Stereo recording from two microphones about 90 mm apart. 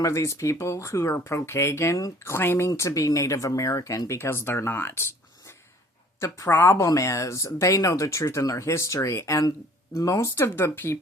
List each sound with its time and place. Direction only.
0.0 s speech: 35° left (ahead or behind)
6.1 s speech: 35° left (ahead or behind)